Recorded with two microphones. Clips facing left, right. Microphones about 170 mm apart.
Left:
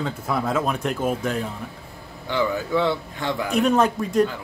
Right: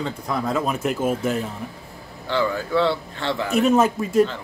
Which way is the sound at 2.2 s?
15° left (ahead or behind).